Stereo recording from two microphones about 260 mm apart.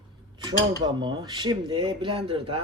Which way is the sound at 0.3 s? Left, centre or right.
Centre.